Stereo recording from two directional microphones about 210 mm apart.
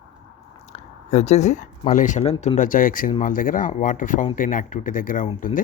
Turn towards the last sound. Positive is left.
turn(degrees=35)  # may be behind; listen again after turning